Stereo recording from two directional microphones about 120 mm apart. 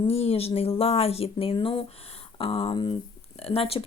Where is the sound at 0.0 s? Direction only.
55° left (ahead or behind).